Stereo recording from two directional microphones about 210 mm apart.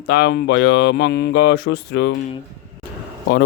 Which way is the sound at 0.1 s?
60° left (ahead or behind).